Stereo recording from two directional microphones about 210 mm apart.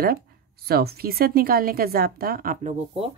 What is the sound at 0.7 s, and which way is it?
Speech, 45° right (ahead or behind).